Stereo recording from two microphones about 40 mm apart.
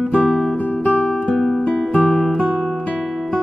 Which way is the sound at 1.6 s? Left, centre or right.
Left.